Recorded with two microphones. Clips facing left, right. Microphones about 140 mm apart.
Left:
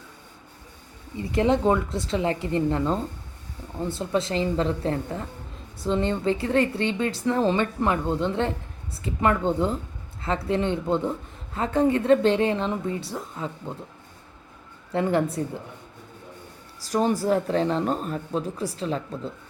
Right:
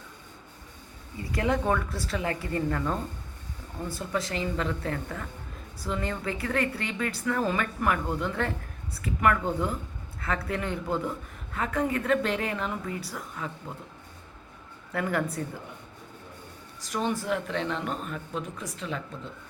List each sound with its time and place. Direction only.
1.2 s a woman's voice: 25° left (ahead or behind)
14.9 s a woman's voice: 25° left (ahead or behind)
16.8 s speech: 35° left (ahead or behind)